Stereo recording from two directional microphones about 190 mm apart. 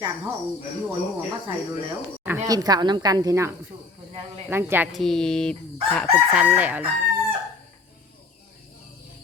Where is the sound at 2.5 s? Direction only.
20° right (ahead or behind).